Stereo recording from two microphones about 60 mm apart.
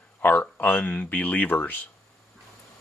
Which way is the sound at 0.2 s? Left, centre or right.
Left.